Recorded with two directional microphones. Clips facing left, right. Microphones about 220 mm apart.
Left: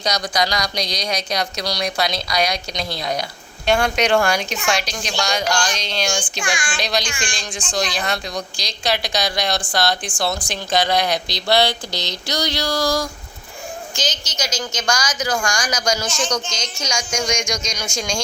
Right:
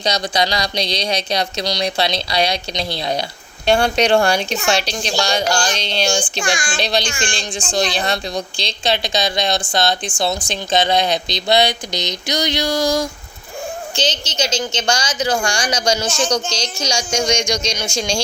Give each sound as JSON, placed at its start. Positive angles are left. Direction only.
{"t": 0.0, "sound": "a woman's voice", "side_deg": -25}
{"t": 6.3, "sound": "child singing", "side_deg": -40}
{"t": 6.7, "sound": "a woman's voice", "side_deg": -30}